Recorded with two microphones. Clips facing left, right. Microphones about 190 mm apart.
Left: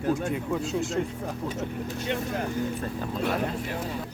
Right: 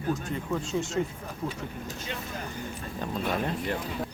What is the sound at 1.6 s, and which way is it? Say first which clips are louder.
Speech: left 6 dB; 65° left (ahead or behind).